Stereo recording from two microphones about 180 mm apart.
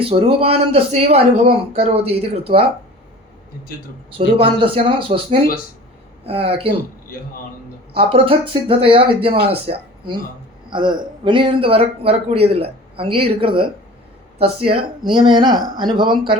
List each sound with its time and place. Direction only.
0.0 s speech: 30° right (ahead or behind)
4.4 s speech: 30° right (ahead or behind)
7.9 s speech: 30° right (ahead or behind)